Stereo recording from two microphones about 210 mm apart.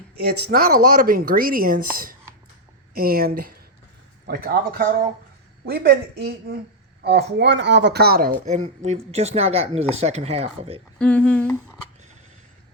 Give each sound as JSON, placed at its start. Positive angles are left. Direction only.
{"t": 0.2, "sound": "speech", "side_deg": -50}
{"t": 10.9, "sound": "speech", "side_deg": 5}